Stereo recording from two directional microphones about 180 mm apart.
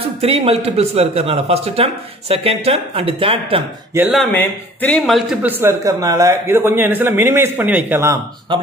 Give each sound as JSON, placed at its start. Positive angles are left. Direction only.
{"t": 0.2, "sound": "a man's voice", "side_deg": -35}
{"t": 3.9, "sound": "speech", "side_deg": -15}
{"t": 4.3, "sound": "speech", "side_deg": 10}
{"t": 5.4, "sound": "speech", "side_deg": -10}